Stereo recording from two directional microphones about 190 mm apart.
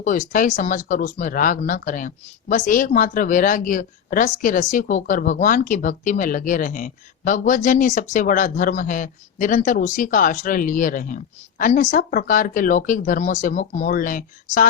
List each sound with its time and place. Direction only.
0.0 s speech: 45° left (ahead or behind)